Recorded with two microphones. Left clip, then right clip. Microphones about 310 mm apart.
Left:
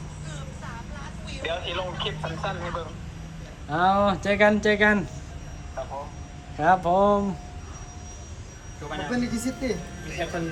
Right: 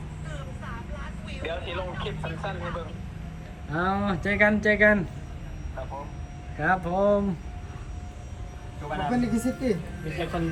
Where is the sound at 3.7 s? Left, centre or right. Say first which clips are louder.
Left 6 dB; centre.